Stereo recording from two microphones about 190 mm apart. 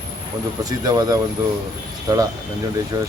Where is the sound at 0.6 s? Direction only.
20° right (ahead or behind).